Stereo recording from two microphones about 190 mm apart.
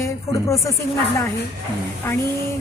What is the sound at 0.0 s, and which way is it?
Speech, 15° left (ahead or behind).